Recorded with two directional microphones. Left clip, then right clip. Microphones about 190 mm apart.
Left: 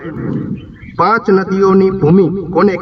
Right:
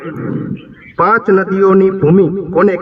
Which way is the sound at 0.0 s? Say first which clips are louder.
Even; 20° left (ahead or behind).